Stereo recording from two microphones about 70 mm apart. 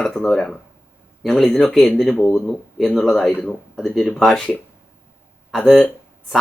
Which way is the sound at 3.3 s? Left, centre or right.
Left.